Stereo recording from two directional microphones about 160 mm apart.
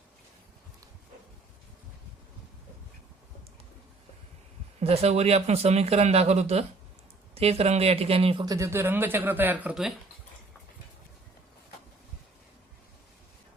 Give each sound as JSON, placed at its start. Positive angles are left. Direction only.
{"t": 4.8, "sound": "speech", "side_deg": -40}
{"t": 8.4, "sound": "speech", "side_deg": -20}